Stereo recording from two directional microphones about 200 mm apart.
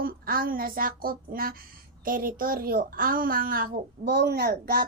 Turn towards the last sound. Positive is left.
turn(degrees=-50)  # may be behind; listen again after turning